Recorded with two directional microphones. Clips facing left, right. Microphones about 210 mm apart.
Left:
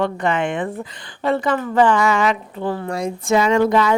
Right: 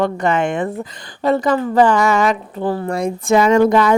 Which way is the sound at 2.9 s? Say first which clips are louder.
Right 3 dB; 55° right (ahead or behind).